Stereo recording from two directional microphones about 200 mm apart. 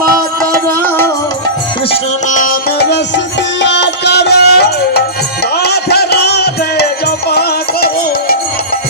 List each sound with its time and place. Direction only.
0.9 s music: 10° left (ahead or behind)
1.9 s music: 40° left (ahead or behind)